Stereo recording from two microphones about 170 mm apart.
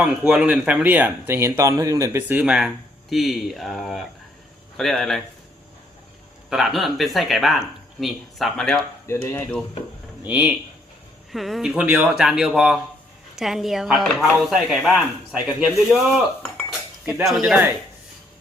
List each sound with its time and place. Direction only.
0.0 s speech: 5° right (ahead or behind)
6.5 s speech: centre (ahead or behind)
9.0 s speech: 15° left (ahead or behind)
10.2 s speech: 10° right (ahead or behind)
16.4 s cutlery: 5° left (ahead or behind)
17.1 s speech: 5° right (ahead or behind)